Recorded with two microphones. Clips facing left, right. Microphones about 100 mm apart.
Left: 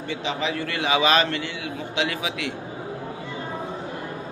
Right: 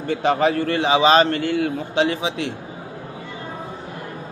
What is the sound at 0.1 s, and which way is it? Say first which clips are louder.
A man's voice: right 9 dB; 50° right (ahead or behind).